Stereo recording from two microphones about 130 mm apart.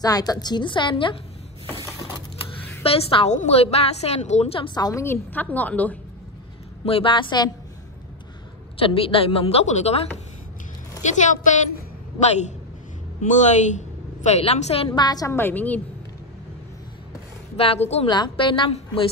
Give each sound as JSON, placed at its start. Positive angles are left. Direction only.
{"t": 0.0, "sound": "a woman's voice", "side_deg": 30}
{"t": 2.8, "sound": "a woman's voice", "side_deg": 50}
{"t": 5.0, "sound": "a woman's voice", "side_deg": 15}
{"t": 6.8, "sound": "a woman's voice", "side_deg": 45}
{"t": 8.8, "sound": "a woman's voice", "side_deg": 45}
{"t": 11.0, "sound": "a woman's voice", "side_deg": 70}
{"t": 14.9, "sound": "a woman's voice", "side_deg": 30}
{"t": 17.6, "sound": "a woman's voice", "side_deg": 50}
{"t": 18.0, "sound": "a woman's voice", "side_deg": 35}